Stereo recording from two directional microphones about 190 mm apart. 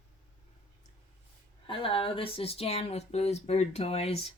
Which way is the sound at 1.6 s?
25° left (ahead or behind).